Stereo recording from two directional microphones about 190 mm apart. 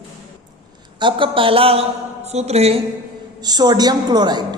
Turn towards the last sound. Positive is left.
turn(degrees=-20)  # may be behind; listen again after turning